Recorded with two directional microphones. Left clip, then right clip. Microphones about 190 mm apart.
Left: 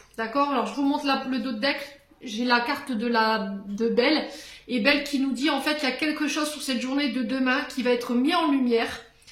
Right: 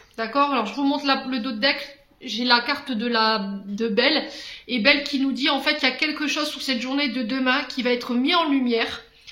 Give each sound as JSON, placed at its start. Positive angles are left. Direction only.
{"t": 0.2, "sound": "speech", "side_deg": -30}